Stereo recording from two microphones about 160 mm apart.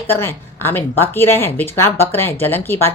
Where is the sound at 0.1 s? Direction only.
15° left (ahead or behind).